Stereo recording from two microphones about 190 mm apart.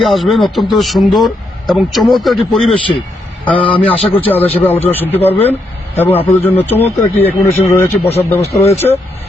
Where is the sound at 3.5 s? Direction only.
30° left (ahead or behind).